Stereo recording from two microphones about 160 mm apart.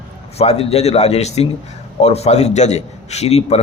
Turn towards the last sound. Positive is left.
turn(degrees=40)  # may be behind; listen again after turning